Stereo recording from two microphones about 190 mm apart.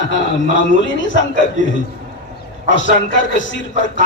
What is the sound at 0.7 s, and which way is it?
Speech, 75° left (ahead or behind).